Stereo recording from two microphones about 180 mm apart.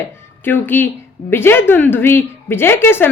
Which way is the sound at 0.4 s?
10° left (ahead or behind).